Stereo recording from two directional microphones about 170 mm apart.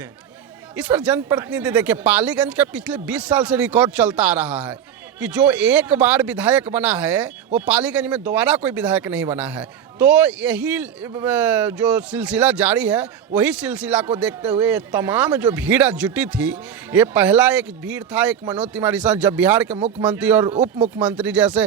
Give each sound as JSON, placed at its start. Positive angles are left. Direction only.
{"t": 0.8, "sound": "speech", "side_deg": -10}
{"t": 19.7, "sound": "speech", "side_deg": -40}
{"t": 20.1, "sound": "speech", "side_deg": -10}